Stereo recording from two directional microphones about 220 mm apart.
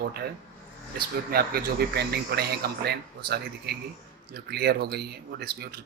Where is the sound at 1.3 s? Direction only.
45° right (ahead or behind).